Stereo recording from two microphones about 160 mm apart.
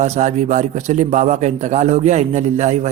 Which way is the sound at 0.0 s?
45° right (ahead or behind).